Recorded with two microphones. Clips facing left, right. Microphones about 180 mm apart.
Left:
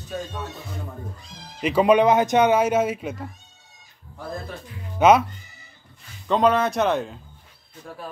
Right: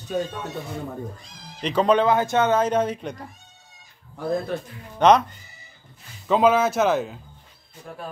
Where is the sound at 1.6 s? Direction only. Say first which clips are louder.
Left 2 dB; 10° left (ahead or behind).